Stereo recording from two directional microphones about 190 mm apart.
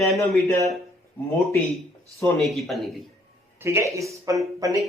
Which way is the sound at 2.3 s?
Centre (ahead or behind).